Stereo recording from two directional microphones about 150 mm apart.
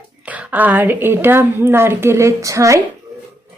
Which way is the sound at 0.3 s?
10° right (ahead or behind).